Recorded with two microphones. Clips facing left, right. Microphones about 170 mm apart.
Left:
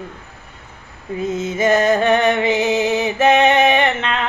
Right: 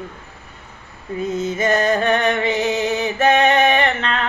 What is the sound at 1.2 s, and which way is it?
Music, 25° left (ahead or behind).